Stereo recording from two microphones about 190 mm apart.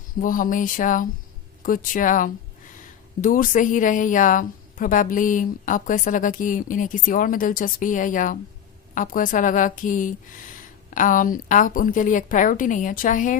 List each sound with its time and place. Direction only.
0.2 s a woman's voice: 45° left (ahead or behind)